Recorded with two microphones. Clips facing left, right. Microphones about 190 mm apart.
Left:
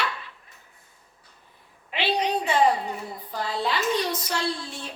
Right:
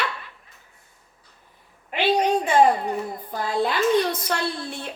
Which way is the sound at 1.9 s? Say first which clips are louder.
Right 5 dB; 45° right (ahead or behind).